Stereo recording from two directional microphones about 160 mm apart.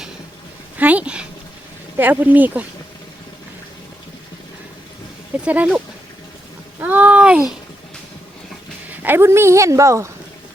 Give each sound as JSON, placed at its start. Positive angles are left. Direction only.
{"t": 0.8, "sound": "a woman's voice", "side_deg": -10}
{"t": 5.5, "sound": "a woman's voice", "side_deg": -5}
{"t": 8.9, "sound": "a woman's voice", "side_deg": -15}